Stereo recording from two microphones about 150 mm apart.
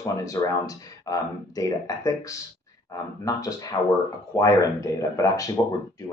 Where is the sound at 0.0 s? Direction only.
20° left (ahead or behind).